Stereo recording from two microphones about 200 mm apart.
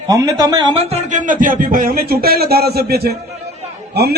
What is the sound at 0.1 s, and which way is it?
Speech, 20° right (ahead or behind).